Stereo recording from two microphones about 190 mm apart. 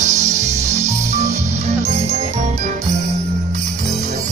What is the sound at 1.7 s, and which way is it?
Jingle bell, 35° right (ahead or behind).